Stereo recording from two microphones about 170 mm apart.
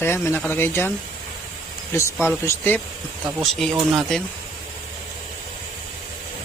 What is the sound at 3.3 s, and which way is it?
Speech, centre (ahead or behind).